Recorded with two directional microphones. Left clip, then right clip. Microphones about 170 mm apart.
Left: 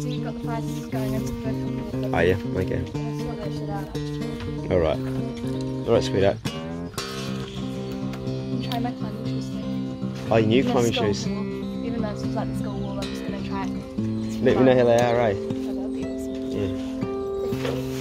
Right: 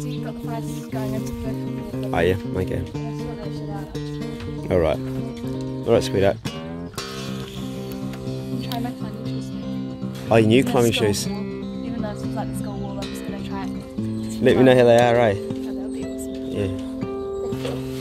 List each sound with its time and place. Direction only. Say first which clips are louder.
2.0 s speech: right 1 dB; 30° right (ahead or behind)
4.6 s speech: right 2 dB; 45° right (ahead or behind)
10.3 s speech: right 3 dB; 70° right (ahead or behind)
14.4 s speech: right 4 dB; 85° right